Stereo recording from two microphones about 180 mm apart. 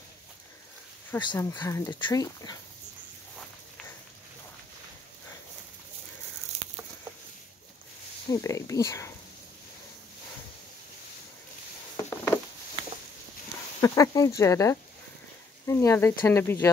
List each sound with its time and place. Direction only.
1.3 s speech: 25° left (ahead or behind)
8.3 s speech: 15° left (ahead or behind)
12.0 s a sound: 15° left (ahead or behind)
13.7 s speech: 15° left (ahead or behind)